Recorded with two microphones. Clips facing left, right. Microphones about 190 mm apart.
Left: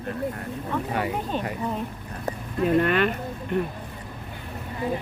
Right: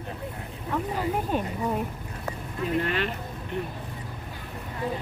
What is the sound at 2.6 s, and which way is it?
Speech, 55° left (ahead or behind).